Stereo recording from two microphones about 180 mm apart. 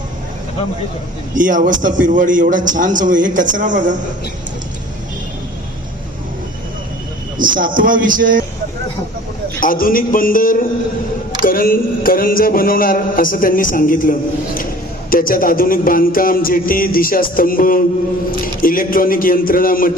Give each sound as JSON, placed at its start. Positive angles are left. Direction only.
{"t": 1.3, "sound": "a man's voice", "side_deg": -45}
{"t": 7.3, "sound": "a man's voice", "side_deg": -50}
{"t": 9.6, "sound": "a sound", "side_deg": 50}